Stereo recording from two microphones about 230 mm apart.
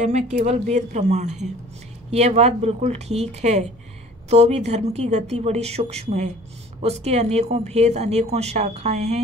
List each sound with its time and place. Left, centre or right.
0.0 s speech: right